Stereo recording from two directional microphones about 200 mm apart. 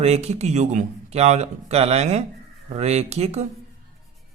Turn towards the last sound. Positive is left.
turn(degrees=-30)  # may be behind; listen again after turning